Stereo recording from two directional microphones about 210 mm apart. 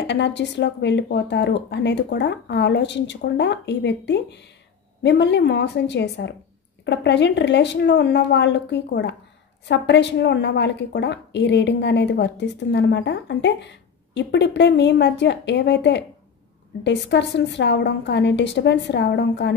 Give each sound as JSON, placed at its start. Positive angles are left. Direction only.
{"t": 0.0, "sound": "a woman's voice", "side_deg": 55}